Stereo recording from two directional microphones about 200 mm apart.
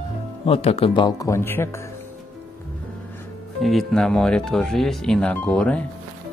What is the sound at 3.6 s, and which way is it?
Speech, centre (ahead or behind).